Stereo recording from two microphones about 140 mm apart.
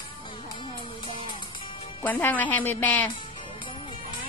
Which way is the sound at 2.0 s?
10° left (ahead or behind).